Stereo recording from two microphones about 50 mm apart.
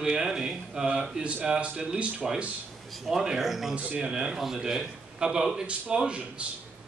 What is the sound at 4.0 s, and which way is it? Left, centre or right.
A man's voice, centre.